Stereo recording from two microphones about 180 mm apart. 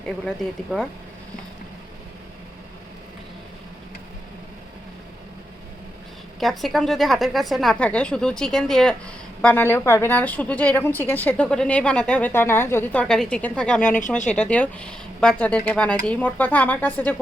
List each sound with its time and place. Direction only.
0.3 s speech: centre (ahead or behind)
6.4 s a woman's voice: centre (ahead or behind)
13.8 s speech: 45° left (ahead or behind)
14.3 s a woman's voice: 5° left (ahead or behind)